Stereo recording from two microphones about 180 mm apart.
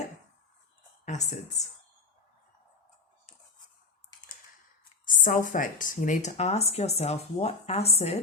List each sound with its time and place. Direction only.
1.0 s speech: 40° left (ahead or behind)
5.0 s speech: 45° left (ahead or behind)